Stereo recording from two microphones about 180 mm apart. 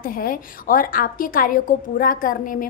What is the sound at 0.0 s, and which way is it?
A woman's voice, 55° left (ahead or behind).